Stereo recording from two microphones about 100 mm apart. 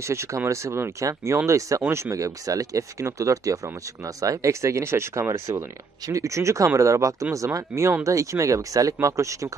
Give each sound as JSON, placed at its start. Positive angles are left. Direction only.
{"t": 0.0, "sound": "speech", "side_deg": -30}